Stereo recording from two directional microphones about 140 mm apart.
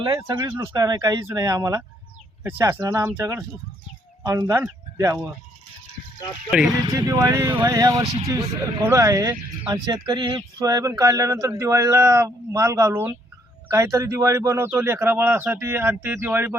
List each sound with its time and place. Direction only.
0.0 s speech: 30° right (ahead or behind)
6.5 s speech: 5° right (ahead or behind)
6.8 s speech: 25° right (ahead or behind)